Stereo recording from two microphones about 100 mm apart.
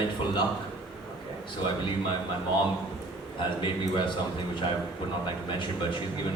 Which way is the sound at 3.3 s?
55° left (ahead or behind).